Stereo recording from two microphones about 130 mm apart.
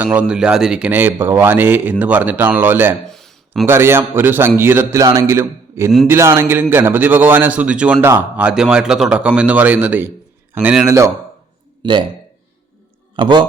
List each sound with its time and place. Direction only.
0.0 s speech: 10° right (ahead or behind)
3.1 s a sound: 5° left (ahead or behind)
3.7 s a man's voice: 20° right (ahead or behind)
10.8 s a man's voice: 25° right (ahead or behind)
11.8 s a man's voice: 35° right (ahead or behind)
13.1 s speech: 35° right (ahead or behind)